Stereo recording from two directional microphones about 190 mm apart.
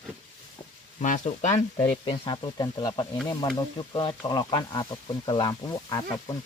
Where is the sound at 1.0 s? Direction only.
40° left (ahead or behind).